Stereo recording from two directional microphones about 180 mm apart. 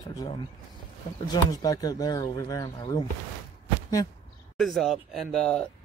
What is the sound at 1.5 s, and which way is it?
Speech, 20° left (ahead or behind).